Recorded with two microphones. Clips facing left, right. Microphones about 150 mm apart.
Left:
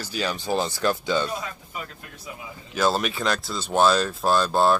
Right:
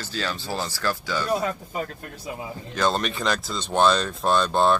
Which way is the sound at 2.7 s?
5° left (ahead or behind).